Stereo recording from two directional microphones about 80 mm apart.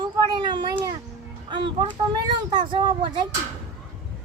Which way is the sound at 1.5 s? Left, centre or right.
Right.